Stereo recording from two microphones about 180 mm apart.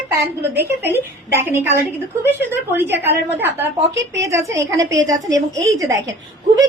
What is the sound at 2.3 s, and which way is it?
A woman's voice, 10° right (ahead or behind).